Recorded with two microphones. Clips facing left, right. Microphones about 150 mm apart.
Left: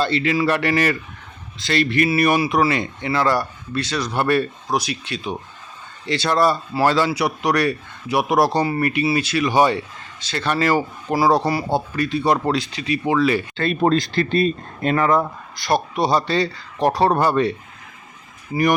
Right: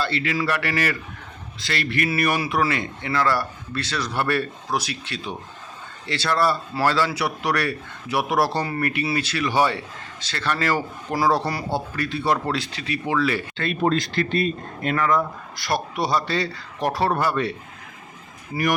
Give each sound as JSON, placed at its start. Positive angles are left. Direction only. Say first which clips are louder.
{"t": 0.0, "sound": "speech", "louder": "left 5 dB", "side_deg": 25}
{"t": 13.6, "sound": "speech", "louder": "left 3 dB", "side_deg": 35}
{"t": 15.6, "sound": "speech", "louder": "left 5 dB", "side_deg": 25}